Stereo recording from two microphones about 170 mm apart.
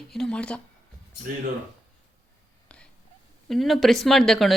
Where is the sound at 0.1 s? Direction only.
5° left (ahead or behind).